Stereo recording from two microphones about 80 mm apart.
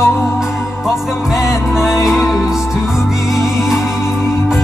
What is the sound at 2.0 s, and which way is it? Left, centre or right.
Music, centre.